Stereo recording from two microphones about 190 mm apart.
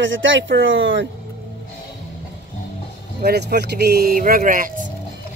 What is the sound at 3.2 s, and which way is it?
Speech, 60° right (ahead or behind).